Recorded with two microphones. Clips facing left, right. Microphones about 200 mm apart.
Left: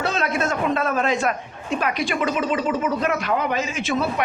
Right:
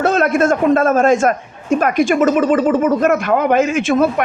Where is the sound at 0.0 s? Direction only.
50° right (ahead or behind).